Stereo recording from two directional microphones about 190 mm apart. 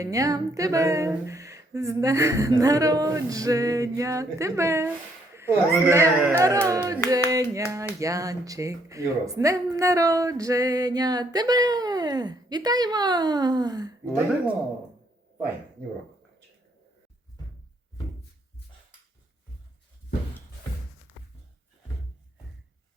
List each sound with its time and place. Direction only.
0.0 s speech: 20° right (ahead or behind)
5.3 s a sound: 15° right (ahead or behind)
5.7 s a woman's voice: 10° right (ahead or behind)